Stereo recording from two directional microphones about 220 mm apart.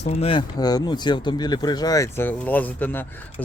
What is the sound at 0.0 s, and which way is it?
Speech, 25° left (ahead or behind).